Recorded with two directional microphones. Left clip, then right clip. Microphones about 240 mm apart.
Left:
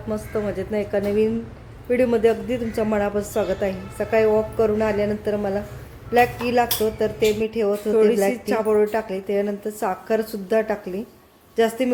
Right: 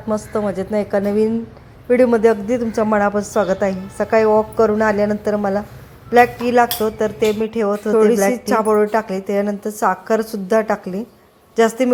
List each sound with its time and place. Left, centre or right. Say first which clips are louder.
0.1 s speech: right 5 dB; centre